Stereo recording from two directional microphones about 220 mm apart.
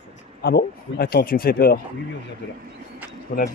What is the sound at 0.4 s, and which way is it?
Speech, 45° left (ahead or behind).